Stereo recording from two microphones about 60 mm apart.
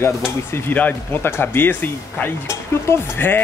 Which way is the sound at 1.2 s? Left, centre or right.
Left.